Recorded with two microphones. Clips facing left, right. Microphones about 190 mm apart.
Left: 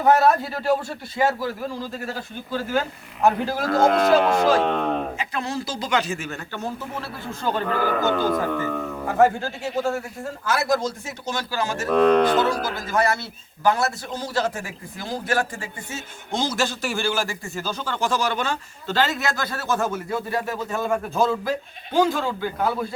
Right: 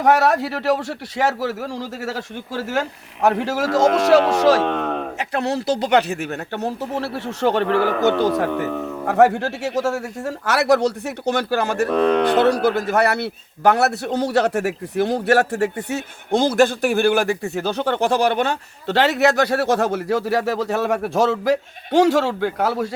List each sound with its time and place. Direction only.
0.0 s a man's voice: 80° right
5.1 s speech: 70° right (ahead or behind)